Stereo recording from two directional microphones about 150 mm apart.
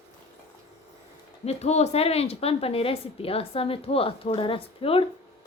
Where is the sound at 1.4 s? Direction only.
45° left (ahead or behind).